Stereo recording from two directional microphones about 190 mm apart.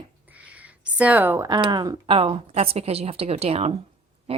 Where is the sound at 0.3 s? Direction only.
5° right (ahead or behind).